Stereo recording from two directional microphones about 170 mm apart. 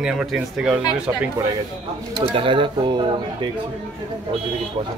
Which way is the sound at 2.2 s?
30° right (ahead or behind).